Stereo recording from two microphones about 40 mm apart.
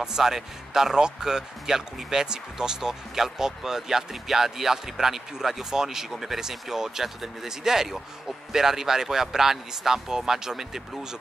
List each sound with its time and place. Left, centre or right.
0.0 s speech: centre